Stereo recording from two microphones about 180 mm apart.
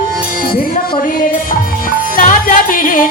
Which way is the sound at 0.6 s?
50° left (ahead or behind).